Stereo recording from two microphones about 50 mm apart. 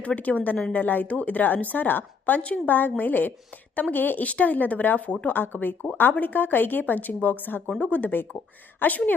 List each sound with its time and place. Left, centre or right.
0.2 s a woman's voice: left